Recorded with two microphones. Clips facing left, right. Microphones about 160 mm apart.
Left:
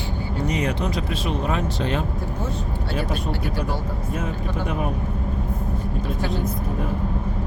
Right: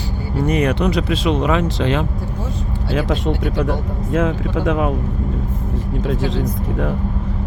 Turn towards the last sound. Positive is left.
turn(degrees=-90)